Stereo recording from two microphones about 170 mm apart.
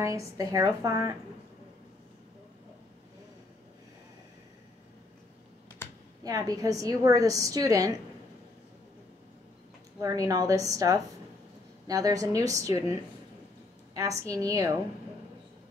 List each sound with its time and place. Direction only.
0.0 s a woman's voice: 20° right (ahead or behind)
6.2 s a woman's voice: 20° right (ahead or behind)
9.9 s a woman's voice: 20° right (ahead or behind)
14.3 s a woman's voice: 20° right (ahead or behind)